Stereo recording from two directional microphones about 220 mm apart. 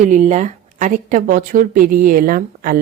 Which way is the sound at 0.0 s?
35° right (ahead or behind).